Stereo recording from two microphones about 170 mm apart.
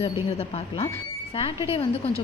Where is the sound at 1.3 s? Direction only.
35° left (ahead or behind).